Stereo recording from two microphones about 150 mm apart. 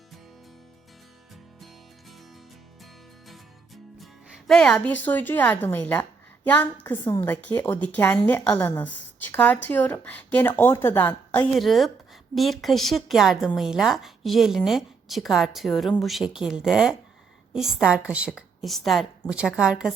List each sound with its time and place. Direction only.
4.4 s a woman's voice: 5° left (ahead or behind)
6.9 s a woman's voice: 30° left (ahead or behind)
7.3 s a woman's voice: 15° left (ahead or behind)
11.5 s a woman's voice: centre (ahead or behind)